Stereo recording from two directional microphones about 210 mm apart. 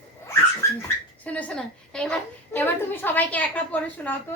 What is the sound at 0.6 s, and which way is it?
A woman's voice, 10° left (ahead or behind).